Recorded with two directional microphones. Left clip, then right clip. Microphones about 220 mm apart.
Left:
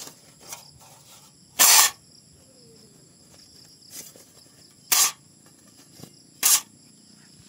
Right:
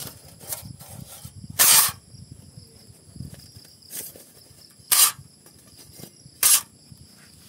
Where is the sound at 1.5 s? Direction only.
10° right (ahead or behind).